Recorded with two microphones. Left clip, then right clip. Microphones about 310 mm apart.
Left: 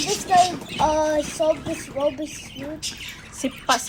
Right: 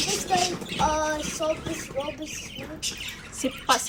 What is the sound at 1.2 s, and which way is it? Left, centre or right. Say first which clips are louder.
Fowl: left 6 dB; centre.